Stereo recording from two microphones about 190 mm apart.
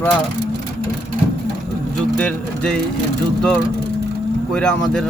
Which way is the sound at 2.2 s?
5° left (ahead or behind).